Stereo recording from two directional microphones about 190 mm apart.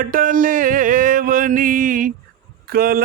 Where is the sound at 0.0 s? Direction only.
45° right (ahead or behind).